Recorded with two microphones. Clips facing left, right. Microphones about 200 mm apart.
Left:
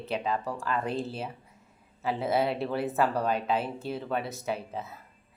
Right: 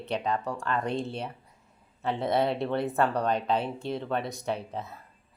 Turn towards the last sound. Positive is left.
turn(degrees=5)  # may be behind; listen again after turning